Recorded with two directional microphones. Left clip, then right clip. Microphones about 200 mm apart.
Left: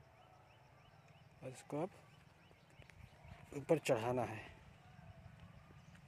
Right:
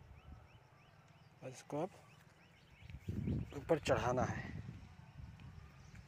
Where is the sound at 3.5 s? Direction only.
25° left (ahead or behind).